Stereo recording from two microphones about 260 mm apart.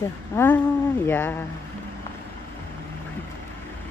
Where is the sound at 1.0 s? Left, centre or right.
Centre.